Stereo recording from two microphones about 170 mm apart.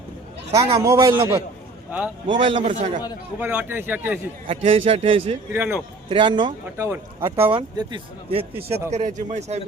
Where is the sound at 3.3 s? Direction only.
10° right (ahead or behind).